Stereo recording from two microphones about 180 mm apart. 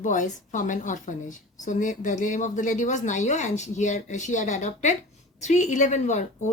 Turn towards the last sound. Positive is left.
turn(degrees=40)  # may be behind; listen again after turning